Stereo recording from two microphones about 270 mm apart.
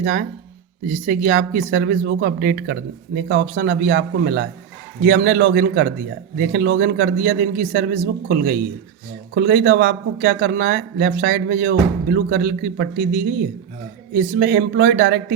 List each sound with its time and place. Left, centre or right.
0.0 s speech: right